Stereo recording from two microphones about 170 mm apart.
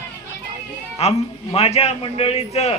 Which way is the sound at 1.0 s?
35° left (ahead or behind).